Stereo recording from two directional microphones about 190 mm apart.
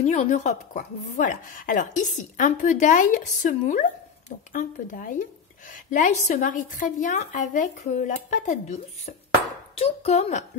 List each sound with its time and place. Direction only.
0.0 s speech: 35° left (ahead or behind)